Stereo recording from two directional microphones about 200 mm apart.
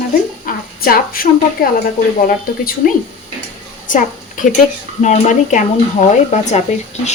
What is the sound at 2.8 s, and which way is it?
A woman's voice, 45° left (ahead or behind).